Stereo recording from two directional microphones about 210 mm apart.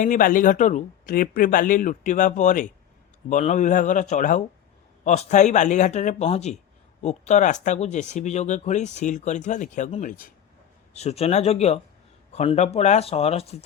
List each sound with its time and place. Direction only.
0.0 s speech: 40° left (ahead or behind)